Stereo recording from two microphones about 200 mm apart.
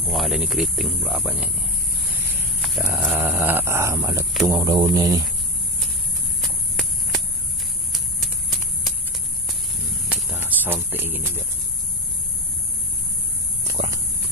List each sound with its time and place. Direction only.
0.1 s speech: centre (ahead or behind)
2.6 s sheep: centre (ahead or behind)
3.0 s speech: 5° right (ahead or behind)
6.4 s walk: centre (ahead or behind)
7.9 s clip-clop: centre (ahead or behind)
10.0 s a sound: 10° right (ahead or behind)